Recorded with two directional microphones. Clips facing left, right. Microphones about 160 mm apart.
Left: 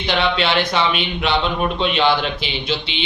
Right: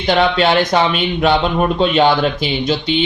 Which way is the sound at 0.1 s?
45° right (ahead or behind).